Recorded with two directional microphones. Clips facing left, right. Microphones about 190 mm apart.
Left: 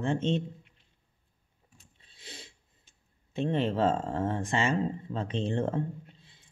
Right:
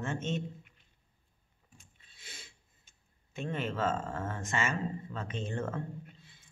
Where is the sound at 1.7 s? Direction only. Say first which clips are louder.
Even; 35° left (ahead or behind).